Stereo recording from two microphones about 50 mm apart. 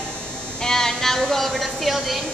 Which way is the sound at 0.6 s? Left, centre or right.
Centre.